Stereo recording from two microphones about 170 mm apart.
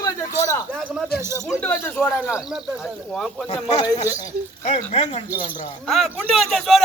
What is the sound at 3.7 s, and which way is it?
Speech, 40° left (ahead or behind).